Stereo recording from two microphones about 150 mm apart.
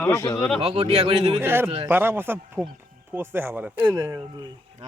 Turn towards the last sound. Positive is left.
turn(degrees=-20)  # may be behind; listen again after turning